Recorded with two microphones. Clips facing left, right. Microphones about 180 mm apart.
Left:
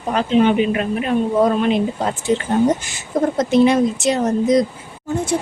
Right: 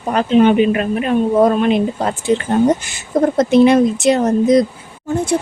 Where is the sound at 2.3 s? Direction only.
70° right (ahead or behind).